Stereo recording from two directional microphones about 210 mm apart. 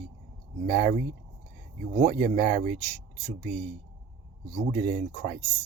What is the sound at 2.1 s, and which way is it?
Speech, 50° right (ahead or behind).